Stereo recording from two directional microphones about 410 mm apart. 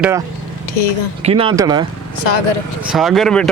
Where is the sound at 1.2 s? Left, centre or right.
Centre.